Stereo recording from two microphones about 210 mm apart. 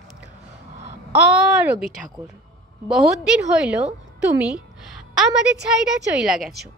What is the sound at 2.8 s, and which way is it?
Speech, centre (ahead or behind).